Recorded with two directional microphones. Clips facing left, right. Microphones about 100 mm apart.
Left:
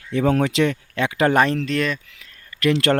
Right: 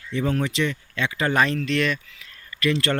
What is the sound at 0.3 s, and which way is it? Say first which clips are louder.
A man's voice: left 5 dB; 75° left (ahead or behind).